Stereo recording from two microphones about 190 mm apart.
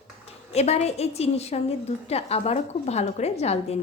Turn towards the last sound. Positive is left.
turn(degrees=35)  # may be behind; listen again after turning